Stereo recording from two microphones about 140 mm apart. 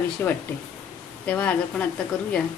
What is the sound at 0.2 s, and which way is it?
A woman's voice, 15° left (ahead or behind).